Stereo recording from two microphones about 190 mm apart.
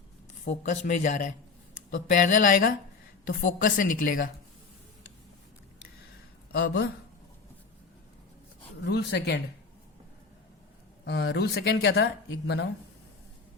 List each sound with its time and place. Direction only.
0.4 s a woman's voice: 40° left (ahead or behind)
6.5 s speech: 55° left (ahead or behind)
8.8 s speech: 65° left (ahead or behind)
11.0 s speech: 60° left (ahead or behind)